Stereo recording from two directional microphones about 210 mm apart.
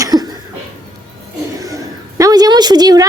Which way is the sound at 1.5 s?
15° right (ahead or behind).